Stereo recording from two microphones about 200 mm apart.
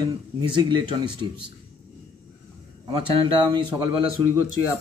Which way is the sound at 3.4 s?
20° right (ahead or behind).